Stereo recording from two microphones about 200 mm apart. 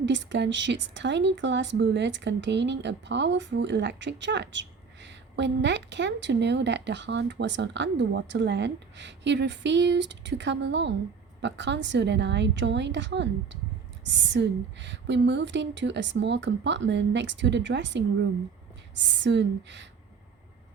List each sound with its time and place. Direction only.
0.0 s a woman's voice: 65° right (ahead or behind)